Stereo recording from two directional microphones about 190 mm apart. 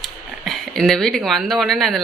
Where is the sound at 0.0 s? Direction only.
Centre (ahead or behind).